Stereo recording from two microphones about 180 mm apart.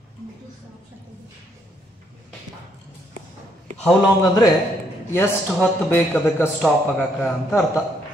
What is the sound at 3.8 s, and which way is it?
A man's voice, 20° left (ahead or behind).